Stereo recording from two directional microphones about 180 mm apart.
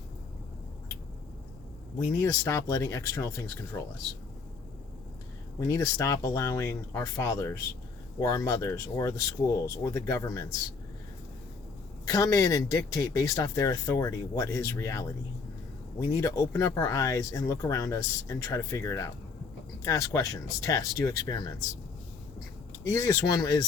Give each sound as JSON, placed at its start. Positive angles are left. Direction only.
{"t": 2.2, "sound": "speech", "side_deg": 20}
{"t": 5.5, "sound": "speech", "side_deg": 20}
{"t": 12.0, "sound": "speech", "side_deg": 20}
{"t": 16.1, "sound": "speech", "side_deg": 20}
{"t": 22.9, "sound": "speech", "side_deg": 20}